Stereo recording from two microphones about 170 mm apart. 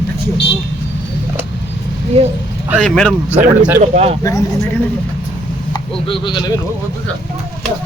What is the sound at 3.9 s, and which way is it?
Speech, 40° right (ahead or behind).